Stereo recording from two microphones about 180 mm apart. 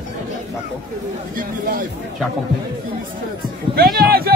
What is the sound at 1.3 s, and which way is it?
Speech, 50° right (ahead or behind).